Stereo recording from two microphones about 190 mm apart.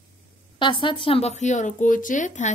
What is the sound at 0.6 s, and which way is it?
Speech, 25° left (ahead or behind).